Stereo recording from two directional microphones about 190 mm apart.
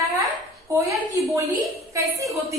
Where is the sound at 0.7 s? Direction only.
15° right (ahead or behind).